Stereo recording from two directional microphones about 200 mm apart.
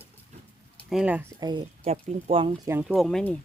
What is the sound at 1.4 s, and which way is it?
Speech, 20° right (ahead or behind).